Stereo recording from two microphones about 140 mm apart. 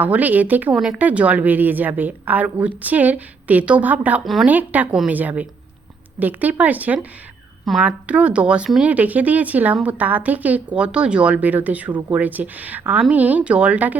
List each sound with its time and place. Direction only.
0.0 s speech: 10° right (ahead or behind)
11.9 s speech: 25° right (ahead or behind)
12.1 s speech: 10° right (ahead or behind)